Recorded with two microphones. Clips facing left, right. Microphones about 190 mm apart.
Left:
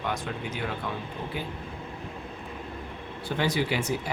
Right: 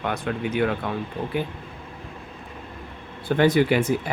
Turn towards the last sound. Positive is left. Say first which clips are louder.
# right 7 dB
turn(degrees=-55)  # may be behind; listen again after turning